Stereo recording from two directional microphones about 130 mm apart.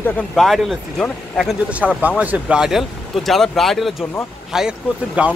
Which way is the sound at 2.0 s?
10° right (ahead or behind).